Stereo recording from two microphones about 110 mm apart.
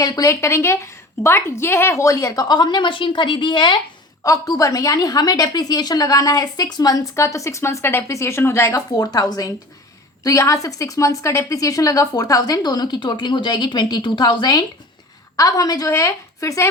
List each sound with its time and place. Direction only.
0.0 s a woman's voice: 30° left (ahead or behind); by 3.8 s 45° left (ahead or behind)
4.2 s a woman's voice: 30° left (ahead or behind)
9.0 s a woman's voice: 35° left (ahead or behind)